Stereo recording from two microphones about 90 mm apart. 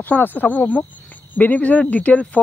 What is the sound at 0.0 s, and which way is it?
Speech, 20° left (ahead or behind).